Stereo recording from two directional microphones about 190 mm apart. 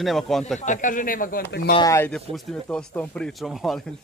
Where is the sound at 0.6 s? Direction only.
40° left (ahead or behind).